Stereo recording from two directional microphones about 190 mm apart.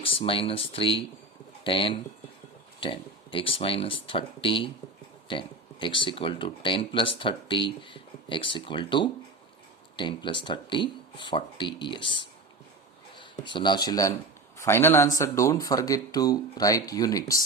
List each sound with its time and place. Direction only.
0.0 s speech: 30° left (ahead or behind)
13.1 s a sound: 25° left (ahead or behind)
13.8 s speech: 20° left (ahead or behind)